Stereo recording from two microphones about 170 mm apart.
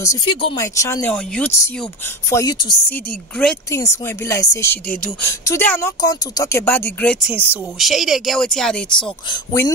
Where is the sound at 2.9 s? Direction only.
5° left (ahead or behind).